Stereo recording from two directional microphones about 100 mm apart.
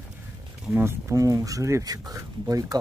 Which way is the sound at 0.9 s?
30° right (ahead or behind).